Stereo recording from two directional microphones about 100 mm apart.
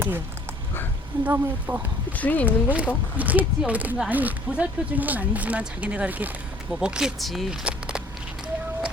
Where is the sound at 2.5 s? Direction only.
15° right (ahead or behind); by 7.6 s centre (ahead or behind).